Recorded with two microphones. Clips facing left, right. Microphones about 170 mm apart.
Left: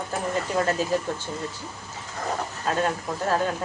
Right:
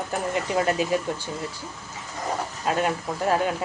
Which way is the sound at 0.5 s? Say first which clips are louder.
Right 1 dB; 10° right (ahead or behind).